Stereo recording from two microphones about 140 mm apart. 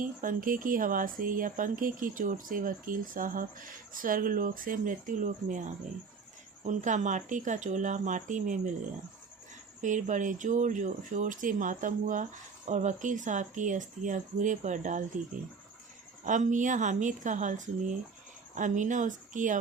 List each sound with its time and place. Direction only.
0.0 s speech: 75° right (ahead or behind)
9.8 s speech: 65° right (ahead or behind)
16.2 s speech: 65° right (ahead or behind)